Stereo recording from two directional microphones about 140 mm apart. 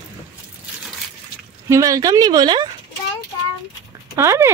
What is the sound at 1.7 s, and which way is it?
Speech, 25° right (ahead or behind).